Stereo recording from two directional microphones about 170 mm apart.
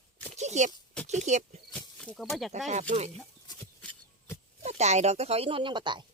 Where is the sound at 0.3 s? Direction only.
40° right (ahead or behind).